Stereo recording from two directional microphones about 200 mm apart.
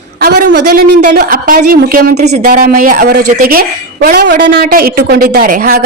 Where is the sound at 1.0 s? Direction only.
45° right (ahead or behind).